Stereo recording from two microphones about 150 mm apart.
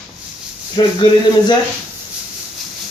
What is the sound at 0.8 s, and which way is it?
Speech, 30° left (ahead or behind).